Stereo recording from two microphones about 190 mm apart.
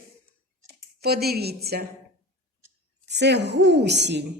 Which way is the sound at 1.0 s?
55° right (ahead or behind).